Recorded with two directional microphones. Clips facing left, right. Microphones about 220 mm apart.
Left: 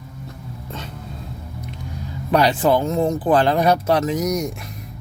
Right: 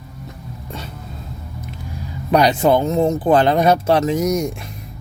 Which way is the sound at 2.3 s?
20° right (ahead or behind).